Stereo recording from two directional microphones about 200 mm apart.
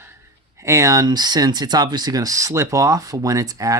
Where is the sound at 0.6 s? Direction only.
15° right (ahead or behind).